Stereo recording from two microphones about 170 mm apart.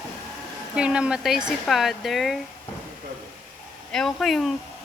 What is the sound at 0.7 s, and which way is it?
Speech, 5° right (ahead or behind).